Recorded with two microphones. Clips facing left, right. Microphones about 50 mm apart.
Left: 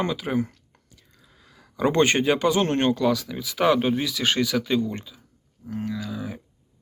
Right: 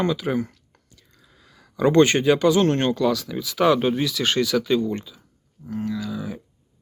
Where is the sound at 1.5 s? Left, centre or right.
Centre.